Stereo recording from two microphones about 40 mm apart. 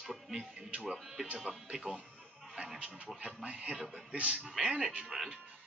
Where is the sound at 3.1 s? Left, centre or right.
Right.